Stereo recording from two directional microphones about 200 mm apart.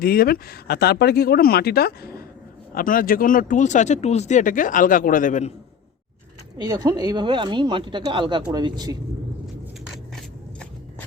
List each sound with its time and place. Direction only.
0.0 s speech: 50° left (ahead or behind)
6.6 s speech: 20° right (ahead or behind)